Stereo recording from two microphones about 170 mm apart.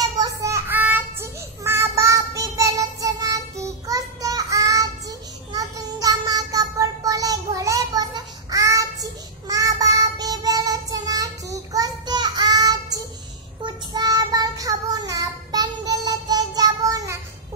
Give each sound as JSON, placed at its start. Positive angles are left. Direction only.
{"t": 0.0, "sound": "child singing", "side_deg": -20}